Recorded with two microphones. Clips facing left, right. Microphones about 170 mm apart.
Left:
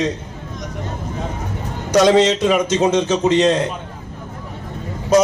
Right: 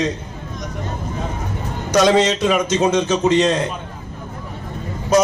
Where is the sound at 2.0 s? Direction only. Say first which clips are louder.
Left 2 dB; 30° left (ahead or behind).